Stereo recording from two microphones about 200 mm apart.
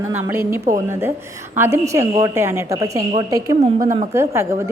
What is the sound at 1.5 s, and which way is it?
A woman's voice, 10° right (ahead or behind).